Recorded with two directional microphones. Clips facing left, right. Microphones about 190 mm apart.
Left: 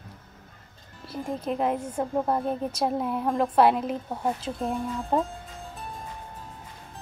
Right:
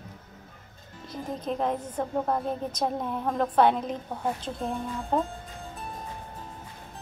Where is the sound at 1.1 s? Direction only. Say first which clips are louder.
Left 2 dB; 5° left (ahead or behind).